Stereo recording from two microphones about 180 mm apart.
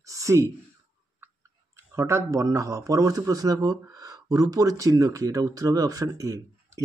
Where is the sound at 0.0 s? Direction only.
15° right (ahead or behind).